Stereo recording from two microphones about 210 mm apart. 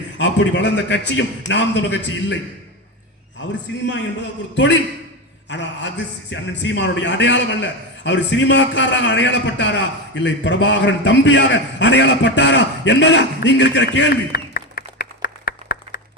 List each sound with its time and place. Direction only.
0.2 s a man's voice: 60° left (ahead or behind)
3.5 s a man's voice: 60° left (ahead or behind)